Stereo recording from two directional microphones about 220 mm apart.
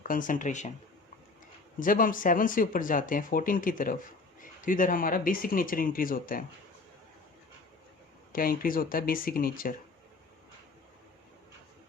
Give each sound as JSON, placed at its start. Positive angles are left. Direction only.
{"t": 0.0, "sound": "speech", "side_deg": 35}
{"t": 1.8, "sound": "speech", "side_deg": 40}
{"t": 8.3, "sound": "speech", "side_deg": 40}